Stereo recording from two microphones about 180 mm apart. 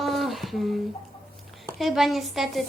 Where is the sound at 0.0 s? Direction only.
Centre (ahead or behind).